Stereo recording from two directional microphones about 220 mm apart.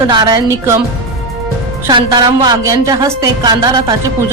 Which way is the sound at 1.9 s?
20° right (ahead or behind).